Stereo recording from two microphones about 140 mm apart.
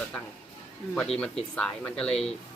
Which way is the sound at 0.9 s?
5° left (ahead or behind).